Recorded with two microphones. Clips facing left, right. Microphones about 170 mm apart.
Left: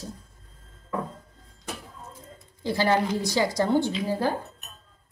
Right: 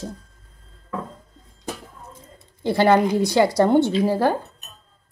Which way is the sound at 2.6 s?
60° right (ahead or behind).